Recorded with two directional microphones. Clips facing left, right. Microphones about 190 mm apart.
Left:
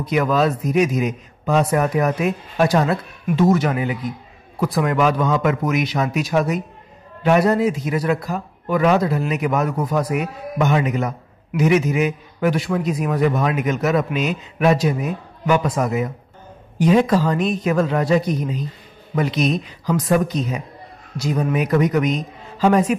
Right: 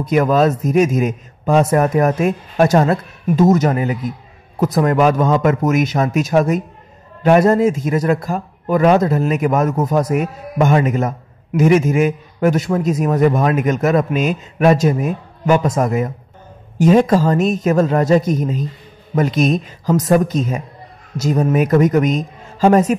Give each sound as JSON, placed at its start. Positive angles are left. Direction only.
{"t": 0.0, "sound": "a man's voice", "side_deg": -45}